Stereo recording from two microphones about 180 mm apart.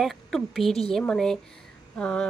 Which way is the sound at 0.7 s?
35° left (ahead or behind).